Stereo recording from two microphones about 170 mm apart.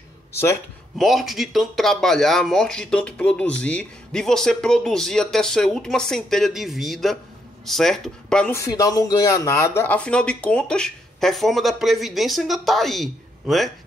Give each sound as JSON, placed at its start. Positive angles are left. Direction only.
{"t": 0.3, "sound": "speech", "side_deg": 15}
{"t": 0.9, "sound": "speech", "side_deg": 0}
{"t": 8.5, "sound": "speech", "side_deg": 20}